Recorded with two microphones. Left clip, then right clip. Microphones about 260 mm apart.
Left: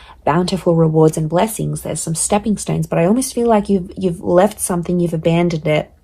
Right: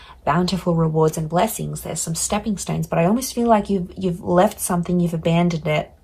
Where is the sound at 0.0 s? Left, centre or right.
Left.